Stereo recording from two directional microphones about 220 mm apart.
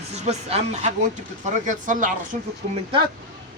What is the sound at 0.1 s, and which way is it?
Speech, 30° right (ahead or behind).